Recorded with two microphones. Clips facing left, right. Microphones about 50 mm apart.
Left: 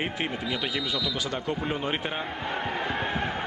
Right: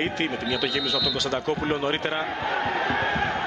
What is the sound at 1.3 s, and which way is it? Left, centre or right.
Speech, right.